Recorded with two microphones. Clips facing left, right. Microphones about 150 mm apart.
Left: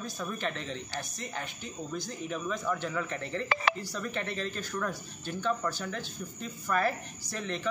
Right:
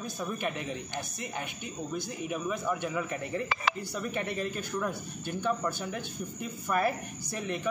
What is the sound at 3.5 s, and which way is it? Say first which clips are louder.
Speech: left 5 dB; 60° left (ahead or behind).